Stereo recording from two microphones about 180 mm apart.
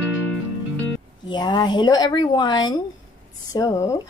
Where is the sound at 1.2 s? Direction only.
25° left (ahead or behind).